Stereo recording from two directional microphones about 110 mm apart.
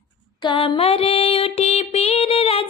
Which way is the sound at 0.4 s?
50° left (ahead or behind).